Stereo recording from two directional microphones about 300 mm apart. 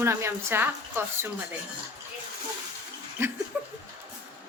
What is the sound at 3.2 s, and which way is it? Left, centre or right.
Speech, centre.